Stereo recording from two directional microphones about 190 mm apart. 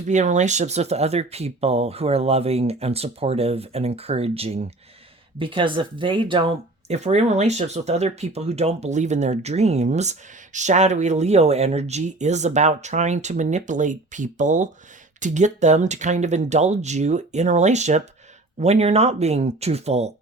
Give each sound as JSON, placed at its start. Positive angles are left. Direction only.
{"t": 0.1, "sound": "speech", "side_deg": -40}